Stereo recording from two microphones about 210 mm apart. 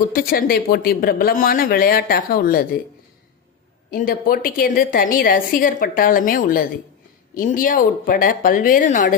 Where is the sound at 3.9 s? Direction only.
40° left (ahead or behind).